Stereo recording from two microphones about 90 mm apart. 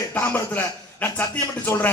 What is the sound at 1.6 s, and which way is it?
Speech, 20° left (ahead or behind).